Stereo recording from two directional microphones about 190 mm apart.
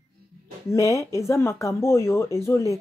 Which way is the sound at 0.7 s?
15° left (ahead or behind).